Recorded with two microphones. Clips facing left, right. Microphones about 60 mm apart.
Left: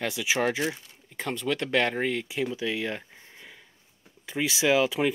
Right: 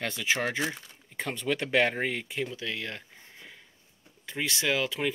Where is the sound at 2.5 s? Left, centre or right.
Centre.